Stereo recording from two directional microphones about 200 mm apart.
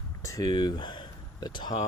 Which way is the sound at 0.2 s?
15° left (ahead or behind).